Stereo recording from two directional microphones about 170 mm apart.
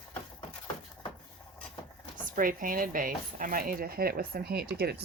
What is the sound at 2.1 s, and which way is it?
Speech, 55° right (ahead or behind).